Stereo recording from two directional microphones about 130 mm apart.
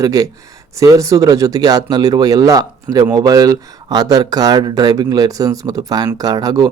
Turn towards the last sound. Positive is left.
turn(degrees=-30)  # may be behind; listen again after turning